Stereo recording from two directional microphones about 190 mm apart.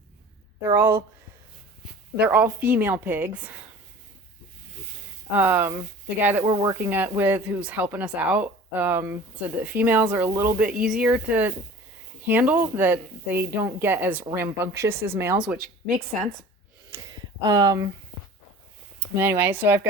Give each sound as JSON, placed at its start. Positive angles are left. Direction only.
{"t": 0.7, "sound": "speech", "side_deg": -10}
{"t": 2.1, "sound": "speech", "side_deg": -10}
{"t": 5.3, "sound": "speech", "side_deg": -10}
{"t": 16.9, "sound": "a sound", "side_deg": -15}
{"t": 19.1, "sound": "speech", "side_deg": -10}